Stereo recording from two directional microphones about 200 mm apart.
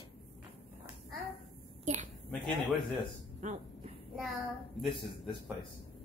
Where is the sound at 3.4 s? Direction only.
35° right (ahead or behind).